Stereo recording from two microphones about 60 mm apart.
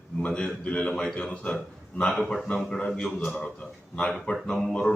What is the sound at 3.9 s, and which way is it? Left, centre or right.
Speech, centre.